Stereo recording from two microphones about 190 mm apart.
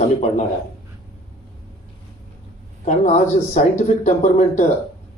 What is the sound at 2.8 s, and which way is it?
A man's voice, 40° left (ahead or behind).